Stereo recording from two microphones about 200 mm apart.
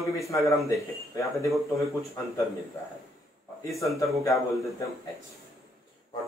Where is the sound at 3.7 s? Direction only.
Centre (ahead or behind).